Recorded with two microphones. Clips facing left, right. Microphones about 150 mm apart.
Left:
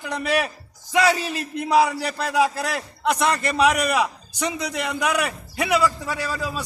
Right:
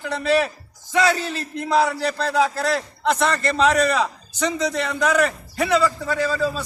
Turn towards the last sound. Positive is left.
turn(degrees=15)  # may be behind; listen again after turning